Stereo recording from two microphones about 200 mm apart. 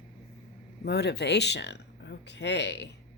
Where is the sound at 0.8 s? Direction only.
55° left (ahead or behind).